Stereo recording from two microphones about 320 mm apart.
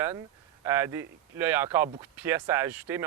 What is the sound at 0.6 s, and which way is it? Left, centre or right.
Speech, centre.